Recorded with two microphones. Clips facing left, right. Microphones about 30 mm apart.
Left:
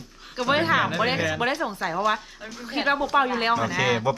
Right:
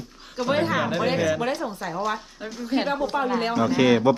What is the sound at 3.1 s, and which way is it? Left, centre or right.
Speech, left.